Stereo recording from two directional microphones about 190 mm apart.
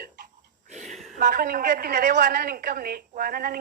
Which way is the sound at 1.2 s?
55° right (ahead or behind).